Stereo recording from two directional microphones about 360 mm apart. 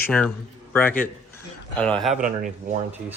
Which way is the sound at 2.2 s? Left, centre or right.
Right.